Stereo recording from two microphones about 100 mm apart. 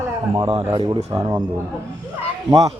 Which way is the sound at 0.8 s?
40° right (ahead or behind).